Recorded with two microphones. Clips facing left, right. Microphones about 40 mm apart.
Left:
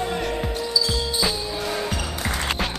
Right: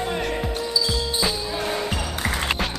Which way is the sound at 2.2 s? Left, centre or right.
Centre.